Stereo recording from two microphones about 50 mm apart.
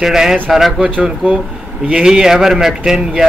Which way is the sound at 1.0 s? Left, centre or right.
Right.